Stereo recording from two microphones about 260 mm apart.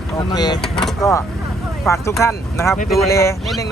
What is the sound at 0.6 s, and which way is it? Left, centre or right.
Speech, centre.